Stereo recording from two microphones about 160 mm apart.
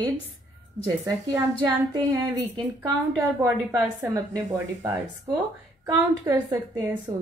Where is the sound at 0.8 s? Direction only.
25° right (ahead or behind).